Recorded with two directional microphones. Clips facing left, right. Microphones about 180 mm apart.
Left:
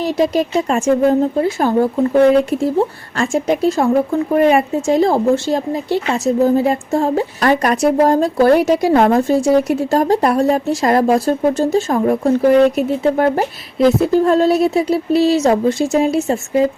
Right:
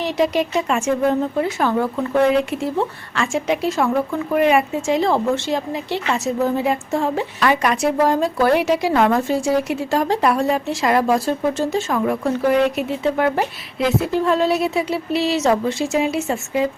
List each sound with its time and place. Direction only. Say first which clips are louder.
0.0 s a woman's voice: left 3 dB; 40° left (ahead or behind)